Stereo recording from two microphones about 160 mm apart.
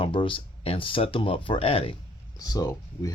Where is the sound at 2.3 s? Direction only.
20° left (ahead or behind).